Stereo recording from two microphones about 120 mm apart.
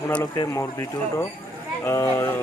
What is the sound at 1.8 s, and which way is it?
Speech, 20° left (ahead or behind).